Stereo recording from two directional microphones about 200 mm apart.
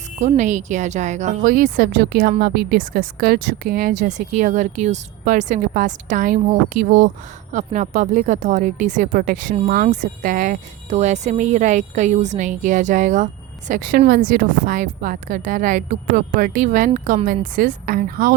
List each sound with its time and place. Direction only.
0.2 s a woman's voice: 35° right (ahead or behind)